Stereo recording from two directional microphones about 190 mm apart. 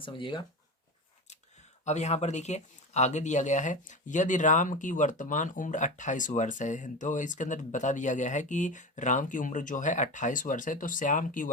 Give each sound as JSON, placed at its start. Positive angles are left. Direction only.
{"t": 0.0, "sound": "speech", "side_deg": 25}
{"t": 1.8, "sound": "speech", "side_deg": 35}